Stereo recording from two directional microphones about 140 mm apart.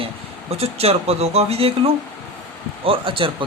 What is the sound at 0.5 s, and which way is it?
Speech, 45° right (ahead or behind).